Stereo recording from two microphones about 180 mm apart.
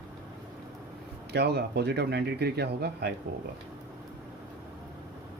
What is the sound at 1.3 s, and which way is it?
Speech, 65° right (ahead or behind).